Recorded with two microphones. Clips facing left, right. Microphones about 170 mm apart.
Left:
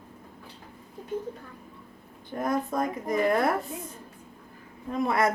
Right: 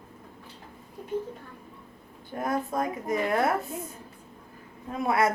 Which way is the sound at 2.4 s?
5° right (ahead or behind).